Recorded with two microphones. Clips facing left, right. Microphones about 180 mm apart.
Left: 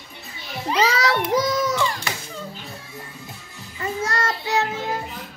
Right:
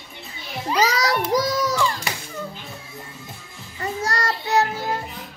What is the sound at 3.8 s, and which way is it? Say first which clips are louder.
Child singing: even; 35° right (ahead or behind).